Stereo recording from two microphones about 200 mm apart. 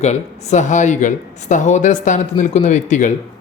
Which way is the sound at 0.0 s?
35° left (ahead or behind).